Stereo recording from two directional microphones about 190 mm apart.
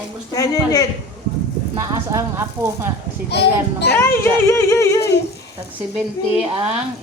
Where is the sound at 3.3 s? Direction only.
60° left (ahead or behind).